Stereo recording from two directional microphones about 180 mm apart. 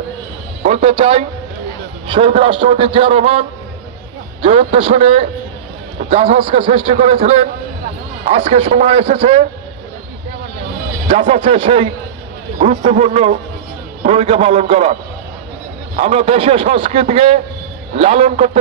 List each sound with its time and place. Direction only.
0.6 s a man's voice: 45° right (ahead or behind)
11.2 s a man's voice: 30° right (ahead or behind)
12.5 s a man's voice: 45° right (ahead or behind)
16.0 s a man's voice: 40° right (ahead or behind)